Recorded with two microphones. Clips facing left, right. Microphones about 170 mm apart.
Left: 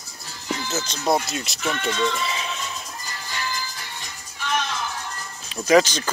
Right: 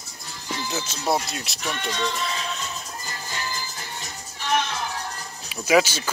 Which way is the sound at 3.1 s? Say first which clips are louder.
Left 2 dB; 20° right (ahead or behind).